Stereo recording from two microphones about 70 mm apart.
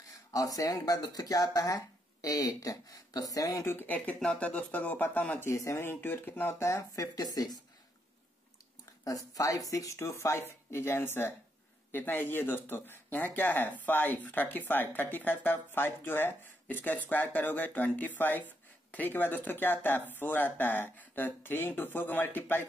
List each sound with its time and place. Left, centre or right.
0.3 s speech: left
3.8 s speech: left
5.4 s speech: left
5.9 s speech: left
6.6 s speech: left
9.0 s speech: left